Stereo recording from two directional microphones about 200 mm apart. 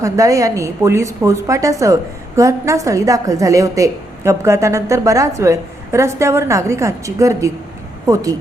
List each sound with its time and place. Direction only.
0.0 s a woman's voice: 15° right (ahead or behind)